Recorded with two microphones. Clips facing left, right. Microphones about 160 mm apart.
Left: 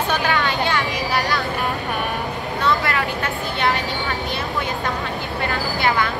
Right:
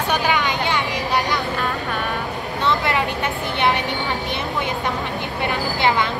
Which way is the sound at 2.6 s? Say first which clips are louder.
Right 1 dB; 20° right (ahead or behind).